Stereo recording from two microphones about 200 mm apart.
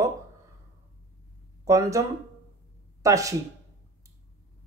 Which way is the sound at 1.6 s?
15° right (ahead or behind).